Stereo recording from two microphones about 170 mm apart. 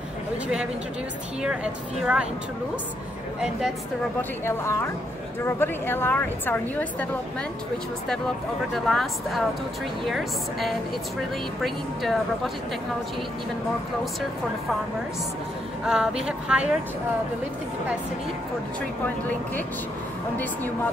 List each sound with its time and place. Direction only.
1.4 s speech: 5° right (ahead or behind)
4.2 s a woman's voice: 15° left (ahead or behind)
8.7 s a woman's voice: centre (ahead or behind)
15.8 s a woman's voice: 5° right (ahead or behind)
19.0 s a woman's voice: 10° left (ahead or behind)